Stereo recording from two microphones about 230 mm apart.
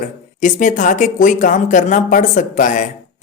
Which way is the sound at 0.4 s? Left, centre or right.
Left.